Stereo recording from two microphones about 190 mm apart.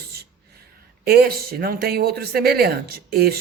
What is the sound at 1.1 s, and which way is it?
Speech, 55° right (ahead or behind).